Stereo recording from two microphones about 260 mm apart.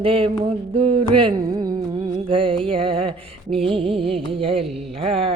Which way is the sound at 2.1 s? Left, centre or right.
Centre.